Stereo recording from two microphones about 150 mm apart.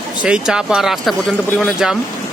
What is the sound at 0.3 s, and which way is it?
Speech, 5° right (ahead or behind).